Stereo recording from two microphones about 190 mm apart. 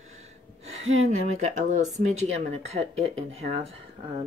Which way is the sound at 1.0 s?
35° right (ahead or behind).